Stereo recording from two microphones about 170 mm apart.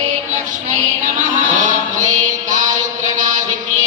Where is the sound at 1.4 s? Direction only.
50° right (ahead or behind).